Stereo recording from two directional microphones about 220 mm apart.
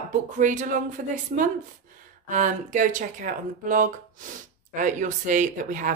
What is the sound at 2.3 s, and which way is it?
Speech, 35° right (ahead or behind).